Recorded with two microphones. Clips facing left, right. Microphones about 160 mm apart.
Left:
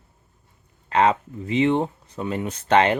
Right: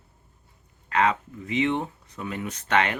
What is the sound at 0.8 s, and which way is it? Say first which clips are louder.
Speech: left 4 dB; 30° left (ahead or behind).